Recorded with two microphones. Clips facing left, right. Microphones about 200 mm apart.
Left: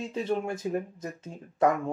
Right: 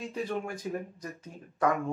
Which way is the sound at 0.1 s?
25° left (ahead or behind).